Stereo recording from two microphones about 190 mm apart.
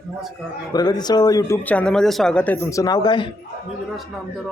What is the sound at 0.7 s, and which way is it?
Speech, 20° left (ahead or behind).